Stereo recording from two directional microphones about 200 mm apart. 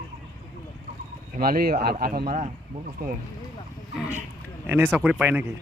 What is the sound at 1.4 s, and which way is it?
Speech, 50° right (ahead or behind).